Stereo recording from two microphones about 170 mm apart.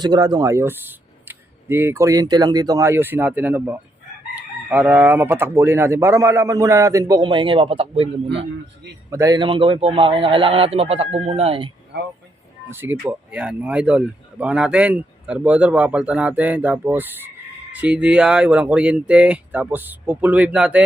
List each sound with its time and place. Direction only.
0.0 s speech: 25° right (ahead or behind)
9.0 s a man's voice: 20° right (ahead or behind)
12.7 s speech: 15° right (ahead or behind)